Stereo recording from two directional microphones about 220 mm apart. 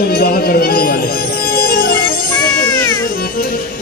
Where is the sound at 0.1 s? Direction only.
45° left (ahead or behind).